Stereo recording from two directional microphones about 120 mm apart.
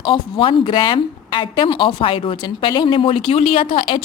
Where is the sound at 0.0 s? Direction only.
45° left (ahead or behind).